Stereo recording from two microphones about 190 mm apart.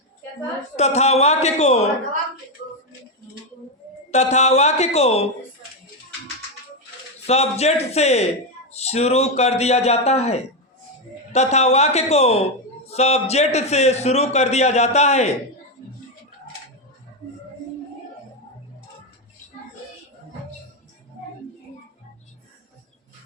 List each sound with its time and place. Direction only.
0.8 s a man's voice: 35° left (ahead or behind)
4.1 s a man's voice: 35° left (ahead or behind)
7.3 s a man's voice: 35° left (ahead or behind)